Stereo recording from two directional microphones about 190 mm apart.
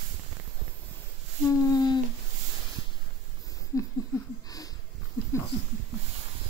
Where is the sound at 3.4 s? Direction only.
20° left (ahead or behind).